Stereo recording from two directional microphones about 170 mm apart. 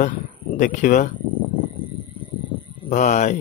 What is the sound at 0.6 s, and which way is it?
Speech, 50° left (ahead or behind).